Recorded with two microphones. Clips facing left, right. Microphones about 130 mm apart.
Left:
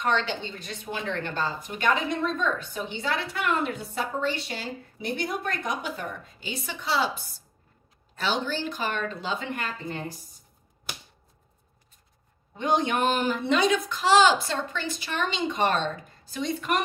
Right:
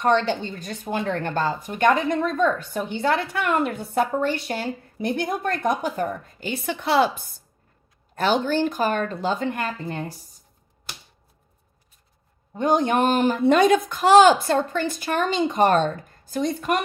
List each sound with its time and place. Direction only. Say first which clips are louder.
0.0 s a woman's voice: right 6 dB; 40° right (ahead or behind)
12.5 s speech: right 5 dB; 45° right (ahead or behind)